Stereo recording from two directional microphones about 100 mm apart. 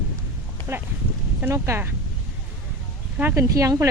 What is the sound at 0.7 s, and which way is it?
Speech, 25° right (ahead or behind).